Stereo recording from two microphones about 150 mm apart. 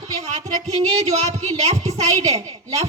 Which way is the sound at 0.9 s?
45° right (ahead or behind).